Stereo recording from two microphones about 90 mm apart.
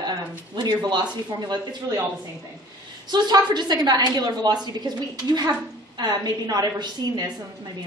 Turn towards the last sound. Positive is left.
turn(degrees=-50)  # may be behind; listen again after turning